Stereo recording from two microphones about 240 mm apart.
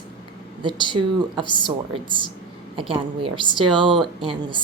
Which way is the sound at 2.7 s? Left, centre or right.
Right.